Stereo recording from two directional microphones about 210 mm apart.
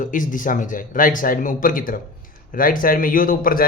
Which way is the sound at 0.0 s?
40° left (ahead or behind).